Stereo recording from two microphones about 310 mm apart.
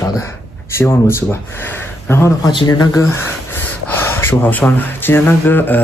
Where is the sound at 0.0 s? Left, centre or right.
Centre.